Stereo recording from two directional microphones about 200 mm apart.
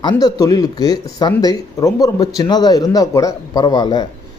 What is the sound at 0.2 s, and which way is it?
Speech, 20° left (ahead or behind).